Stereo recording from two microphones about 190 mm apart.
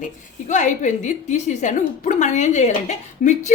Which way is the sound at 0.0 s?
40° left (ahead or behind).